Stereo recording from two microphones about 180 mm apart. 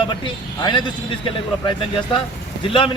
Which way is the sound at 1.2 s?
25° left (ahead or behind).